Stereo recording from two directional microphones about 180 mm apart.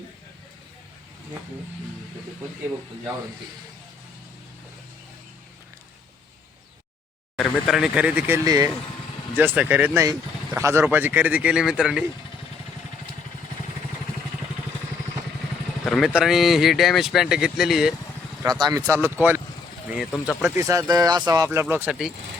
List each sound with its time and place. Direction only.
7.3 s speech: centre (ahead or behind)
8.4 s speech: 20° right (ahead or behind)
9.4 s speech: 10° right (ahead or behind)
15.8 s speech: centre (ahead or behind)
18.4 s speech: 20° right (ahead or behind)
19.9 s speech: 5° right (ahead or behind)
20.6 s speech: 20° right (ahead or behind)